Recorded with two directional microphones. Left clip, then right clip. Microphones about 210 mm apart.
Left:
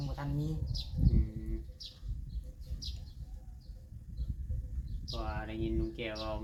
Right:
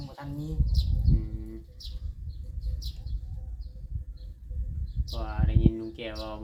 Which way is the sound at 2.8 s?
40° right (ahead or behind).